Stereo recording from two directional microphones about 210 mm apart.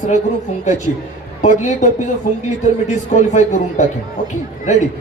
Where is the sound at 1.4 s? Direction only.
35° left (ahead or behind).